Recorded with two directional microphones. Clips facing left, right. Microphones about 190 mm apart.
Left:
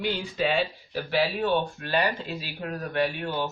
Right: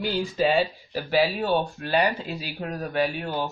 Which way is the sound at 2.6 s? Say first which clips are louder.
Right 2 dB; 35° right (ahead or behind).